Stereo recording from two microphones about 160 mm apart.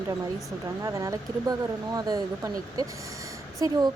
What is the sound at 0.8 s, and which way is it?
A woman's voice, 20° right (ahead or behind).